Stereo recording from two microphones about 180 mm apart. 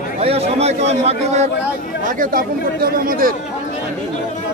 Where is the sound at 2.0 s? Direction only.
50° right (ahead or behind).